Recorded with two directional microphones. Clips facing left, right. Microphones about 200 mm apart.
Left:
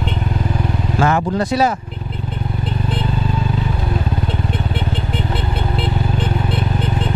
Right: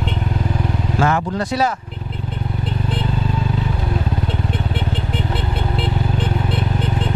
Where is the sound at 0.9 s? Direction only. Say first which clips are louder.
Left 2 dB; 15° left (ahead or behind).